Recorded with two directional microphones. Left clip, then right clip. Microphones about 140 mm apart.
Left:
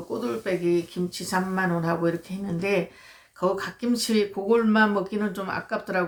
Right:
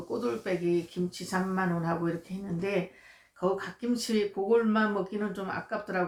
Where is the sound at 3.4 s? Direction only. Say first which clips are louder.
Left 5 dB; 30° left (ahead or behind).